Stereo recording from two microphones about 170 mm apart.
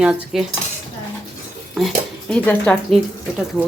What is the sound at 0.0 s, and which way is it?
Cutlery, 5° right (ahead or behind).